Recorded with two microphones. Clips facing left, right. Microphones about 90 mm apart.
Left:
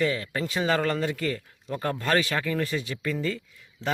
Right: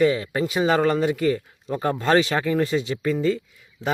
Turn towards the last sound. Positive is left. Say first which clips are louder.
# right 4 dB
turn(degrees=-15)  # may be behind; listen again after turning